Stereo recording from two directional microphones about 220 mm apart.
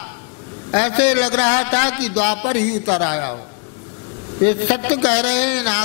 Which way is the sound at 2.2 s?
15° left (ahead or behind).